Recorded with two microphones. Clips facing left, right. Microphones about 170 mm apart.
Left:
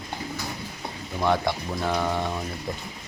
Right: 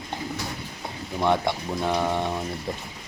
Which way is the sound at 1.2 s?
20° right (ahead or behind).